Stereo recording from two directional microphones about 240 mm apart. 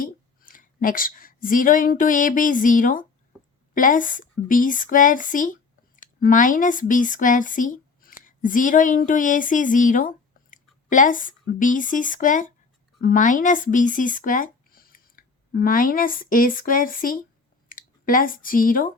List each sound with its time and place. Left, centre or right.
0.0 s a woman's voice: left
3.3 s a sound: centre
3.8 s speech: left